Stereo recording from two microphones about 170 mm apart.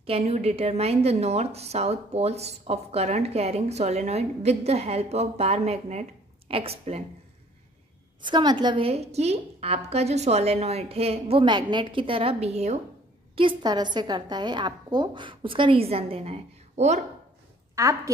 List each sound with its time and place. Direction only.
0.0 s a woman's voice: 35° right (ahead or behind)
8.2 s a woman's voice: 25° right (ahead or behind)
13.4 s a woman's voice: 25° right (ahead or behind)
17.7 s a woman's voice: 20° right (ahead or behind)